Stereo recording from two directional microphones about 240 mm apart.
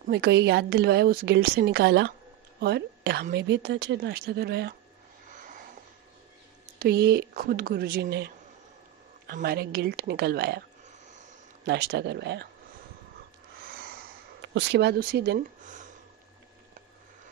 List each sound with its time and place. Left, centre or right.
0.0 s a woman's voice: right
5.3 s a sound: right
6.8 s speech: right
9.3 s speech: right
11.6 s a woman's voice: right
13.7 s a sound: right